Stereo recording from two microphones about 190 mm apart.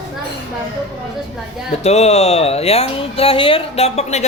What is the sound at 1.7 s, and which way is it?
Speech, 35° left (ahead or behind).